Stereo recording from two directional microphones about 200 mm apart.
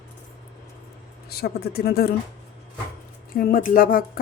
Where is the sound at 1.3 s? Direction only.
50° left (ahead or behind).